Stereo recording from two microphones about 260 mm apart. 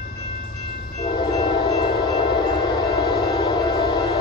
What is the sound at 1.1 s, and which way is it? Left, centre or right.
Train, centre.